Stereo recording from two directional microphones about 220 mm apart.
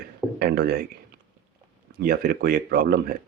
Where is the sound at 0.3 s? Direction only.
45° right (ahead or behind).